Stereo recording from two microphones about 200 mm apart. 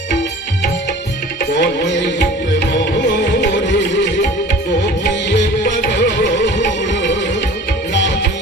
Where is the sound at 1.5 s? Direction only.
60° left (ahead or behind).